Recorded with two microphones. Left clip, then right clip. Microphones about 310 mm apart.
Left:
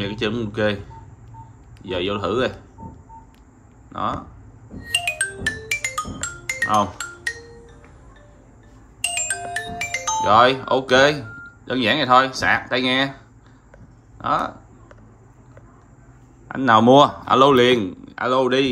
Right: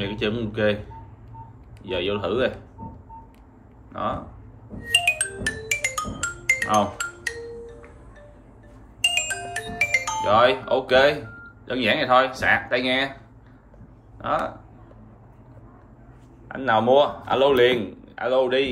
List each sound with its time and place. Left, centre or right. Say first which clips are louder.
0.0 s speech: left 2 dB; centre
1.8 s speech: left 2 dB; centre
3.9 s speech: left 2 dB; centre
4.8 s music: right 2 dB; centre
9.3 s music: left 3 dB; centre
10.2 s a man's voice: left 4 dB; centre
14.1 s speech: left 3 dB; centre
16.4 s a man's voice: left 5 dB; centre